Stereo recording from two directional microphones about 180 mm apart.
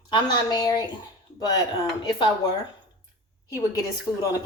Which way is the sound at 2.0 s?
20° left (ahead or behind).